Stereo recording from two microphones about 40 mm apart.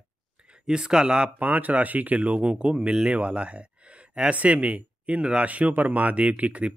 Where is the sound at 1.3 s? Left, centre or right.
Right.